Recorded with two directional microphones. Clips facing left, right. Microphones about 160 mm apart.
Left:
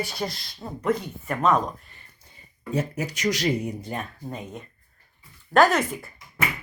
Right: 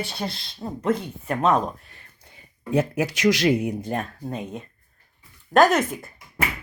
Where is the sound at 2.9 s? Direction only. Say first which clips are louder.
Right 6 dB; 85° right.